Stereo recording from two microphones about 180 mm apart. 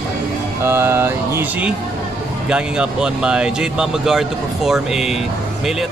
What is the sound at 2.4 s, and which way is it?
Speech, 5° right (ahead or behind).